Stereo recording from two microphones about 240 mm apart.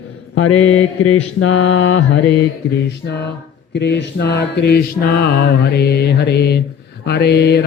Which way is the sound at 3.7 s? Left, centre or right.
Left.